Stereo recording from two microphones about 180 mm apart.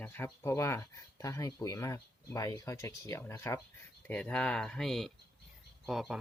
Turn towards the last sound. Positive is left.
turn(degrees=0)  # may be behind; listen again after turning